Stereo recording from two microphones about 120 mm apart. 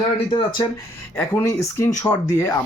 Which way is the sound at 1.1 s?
15° left (ahead or behind).